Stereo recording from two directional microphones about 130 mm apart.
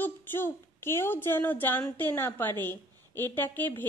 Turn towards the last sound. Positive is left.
turn(degrees=15)  # may be behind; listen again after turning